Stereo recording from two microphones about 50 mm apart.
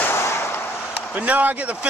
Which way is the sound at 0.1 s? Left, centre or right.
Left.